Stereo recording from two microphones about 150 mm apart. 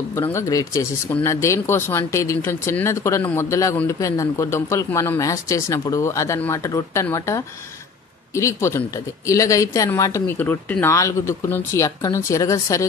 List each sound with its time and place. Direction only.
0.3 s speech: 20° left (ahead or behind)